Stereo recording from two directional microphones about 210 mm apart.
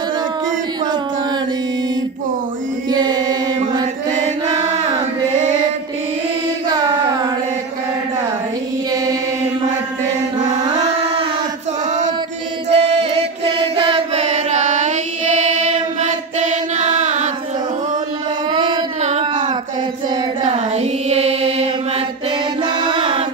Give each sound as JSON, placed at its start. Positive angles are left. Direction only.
{"t": 2.9, "sound": "chant", "side_deg": -20}
{"t": 12.6, "sound": "chant", "side_deg": -30}
{"t": 18.5, "sound": "a sound", "side_deg": -25}
{"t": 20.4, "sound": "child singing", "side_deg": -30}
{"t": 22.6, "sound": "music", "side_deg": -25}